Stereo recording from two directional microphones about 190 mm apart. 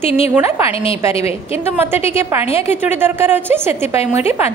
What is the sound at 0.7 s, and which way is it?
Speech, 30° left (ahead or behind).